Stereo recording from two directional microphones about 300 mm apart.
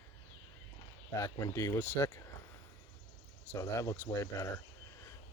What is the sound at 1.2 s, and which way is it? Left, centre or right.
Speech, centre.